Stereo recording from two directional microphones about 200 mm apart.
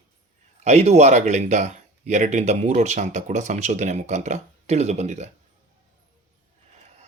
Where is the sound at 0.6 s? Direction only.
35° right (ahead or behind).